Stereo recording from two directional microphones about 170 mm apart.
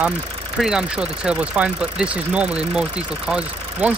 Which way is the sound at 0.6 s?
5° right (ahead or behind).